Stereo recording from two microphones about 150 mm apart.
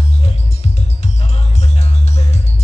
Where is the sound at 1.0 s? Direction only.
45° left (ahead or behind).